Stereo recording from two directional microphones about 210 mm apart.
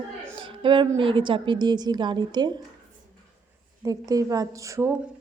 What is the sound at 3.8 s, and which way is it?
A woman's voice, 15° right (ahead or behind).